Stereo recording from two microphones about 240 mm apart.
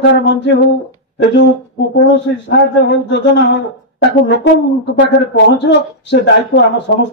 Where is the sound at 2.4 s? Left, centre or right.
Left.